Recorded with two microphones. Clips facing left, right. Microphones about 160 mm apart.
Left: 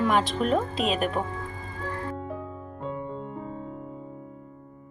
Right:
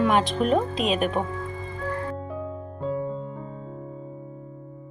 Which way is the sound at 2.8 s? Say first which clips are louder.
Right 6 dB; centre (ahead or behind).